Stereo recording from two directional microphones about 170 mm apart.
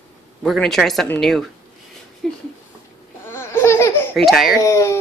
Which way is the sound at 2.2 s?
5° left (ahead or behind).